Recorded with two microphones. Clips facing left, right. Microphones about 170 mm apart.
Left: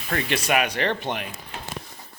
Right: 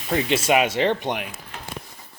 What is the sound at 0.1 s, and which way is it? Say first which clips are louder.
Speech: right 4 dB; 15° right (ahead or behind).